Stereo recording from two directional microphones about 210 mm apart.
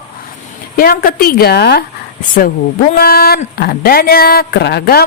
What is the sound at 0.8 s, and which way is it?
Speech, 45° left (ahead or behind).